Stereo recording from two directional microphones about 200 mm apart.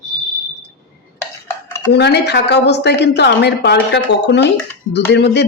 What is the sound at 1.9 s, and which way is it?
Speech, 55° left (ahead or behind).